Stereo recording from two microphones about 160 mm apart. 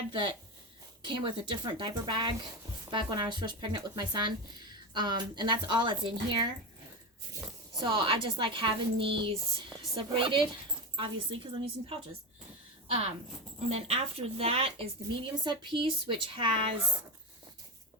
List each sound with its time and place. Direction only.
0.1 s speech: 30° right (ahead or behind)
7.8 s speech: 30° right (ahead or behind)